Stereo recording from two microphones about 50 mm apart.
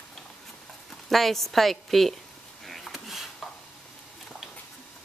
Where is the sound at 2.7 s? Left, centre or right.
Centre.